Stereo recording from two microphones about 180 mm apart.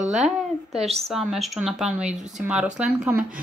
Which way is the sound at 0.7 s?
35° right (ahead or behind).